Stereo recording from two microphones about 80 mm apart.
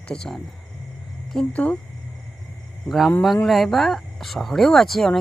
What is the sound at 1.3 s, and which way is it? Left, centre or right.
Speech, centre.